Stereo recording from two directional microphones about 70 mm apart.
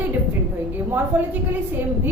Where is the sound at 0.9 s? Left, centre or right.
Right.